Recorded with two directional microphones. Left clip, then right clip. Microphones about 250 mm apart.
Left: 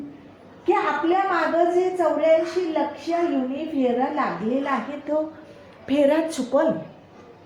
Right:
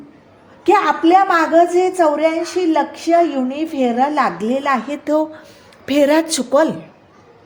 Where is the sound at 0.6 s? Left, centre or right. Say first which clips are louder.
Right 8 dB; right.